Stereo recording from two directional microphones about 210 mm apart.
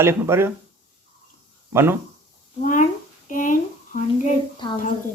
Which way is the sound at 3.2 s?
40° left (ahead or behind).